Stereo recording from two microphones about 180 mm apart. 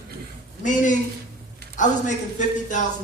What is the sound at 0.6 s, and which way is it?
A man's voice, 45° left (ahead or behind).